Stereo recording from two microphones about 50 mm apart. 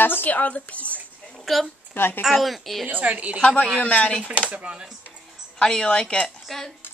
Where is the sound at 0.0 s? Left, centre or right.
Left.